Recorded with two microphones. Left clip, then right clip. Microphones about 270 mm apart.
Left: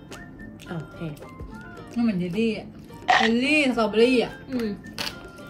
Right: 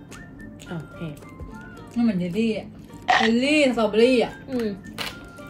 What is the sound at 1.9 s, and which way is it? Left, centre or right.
Speech, centre.